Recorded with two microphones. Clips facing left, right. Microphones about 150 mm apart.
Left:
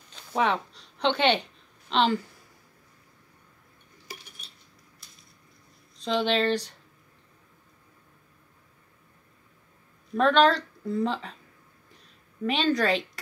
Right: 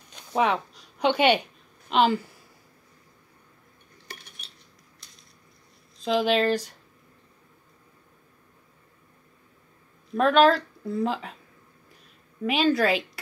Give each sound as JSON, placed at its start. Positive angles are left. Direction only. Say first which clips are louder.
{"t": 0.1, "sound": "a sound", "louder": "right 2 dB", "side_deg": -10}
{"t": 5.9, "sound": "a woman's voice", "louder": "right 3 dB", "side_deg": -5}
{"t": 10.1, "sound": "a woman's voice", "louder": "right 2 dB", "side_deg": -5}
{"t": 12.4, "sound": "speech", "louder": "right 2 dB", "side_deg": -5}